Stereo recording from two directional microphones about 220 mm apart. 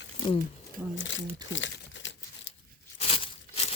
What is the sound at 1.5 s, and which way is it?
Crumpling, 55° left (ahead or behind).